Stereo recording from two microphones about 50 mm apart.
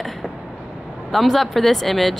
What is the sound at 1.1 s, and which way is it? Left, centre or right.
Speech, centre.